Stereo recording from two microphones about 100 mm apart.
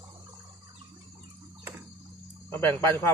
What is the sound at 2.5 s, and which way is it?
Speech, 20° left (ahead or behind).